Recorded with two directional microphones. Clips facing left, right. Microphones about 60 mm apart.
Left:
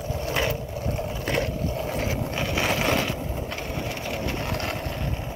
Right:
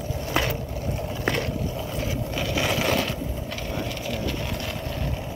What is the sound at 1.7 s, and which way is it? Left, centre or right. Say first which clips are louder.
Vehicle: left 2 dB; left.